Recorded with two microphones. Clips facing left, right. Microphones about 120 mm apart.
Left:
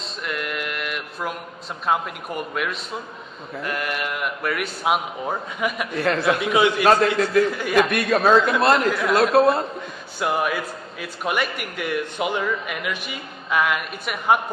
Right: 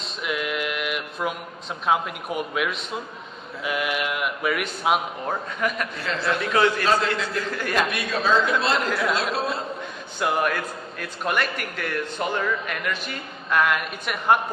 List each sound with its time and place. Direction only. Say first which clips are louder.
0.0 s male singing: right 1 dB; 5° right (ahead or behind)
1.9 s a man's voice: even; centre (ahead or behind)
5.9 s a man's voice: left 6 dB; 60° left (ahead or behind)
6.4 s a man's voice: left 2 dB; 15° left (ahead or behind)
7.9 s a man's voice: left 6 dB; 55° left (ahead or behind)
8.9 s a man's voice: left 2 dB; centre (ahead or behind)
9.1 s a man's voice: left 9 dB; 55° left (ahead or behind)
10.2 s a man's voice: left 1 dB; 5° left (ahead or behind)